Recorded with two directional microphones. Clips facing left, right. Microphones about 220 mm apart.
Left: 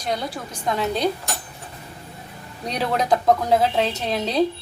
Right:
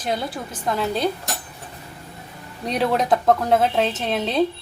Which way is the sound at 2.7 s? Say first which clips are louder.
Right 2 dB; centre (ahead or behind).